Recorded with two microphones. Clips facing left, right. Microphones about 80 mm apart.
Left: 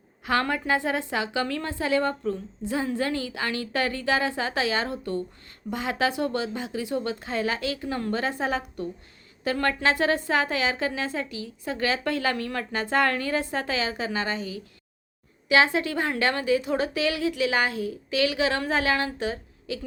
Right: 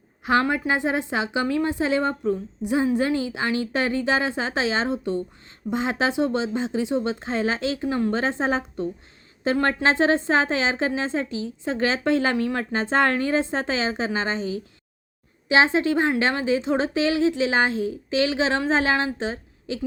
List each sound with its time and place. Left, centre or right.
0.3 s a woman's voice: right